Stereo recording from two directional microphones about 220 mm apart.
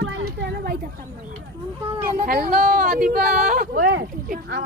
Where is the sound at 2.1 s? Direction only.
40° right (ahead or behind).